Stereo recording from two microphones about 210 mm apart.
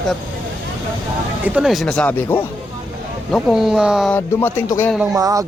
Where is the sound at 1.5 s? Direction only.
Centre (ahead or behind).